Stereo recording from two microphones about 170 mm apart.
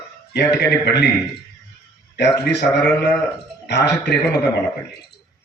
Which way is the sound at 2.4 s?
85° left.